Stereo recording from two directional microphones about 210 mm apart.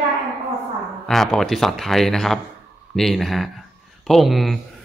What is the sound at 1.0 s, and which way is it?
Speech, centre (ahead or behind).